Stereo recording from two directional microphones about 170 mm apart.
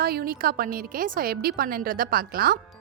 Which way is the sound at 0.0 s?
60° right (ahead or behind).